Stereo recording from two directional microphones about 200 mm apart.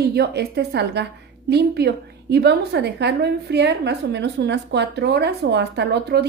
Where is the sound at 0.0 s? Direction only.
55° right (ahead or behind).